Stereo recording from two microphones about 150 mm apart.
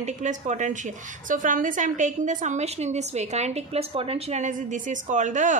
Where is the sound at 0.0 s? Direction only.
50° right (ahead or behind).